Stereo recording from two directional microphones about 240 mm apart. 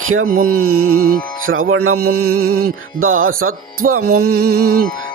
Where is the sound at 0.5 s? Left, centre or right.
Right.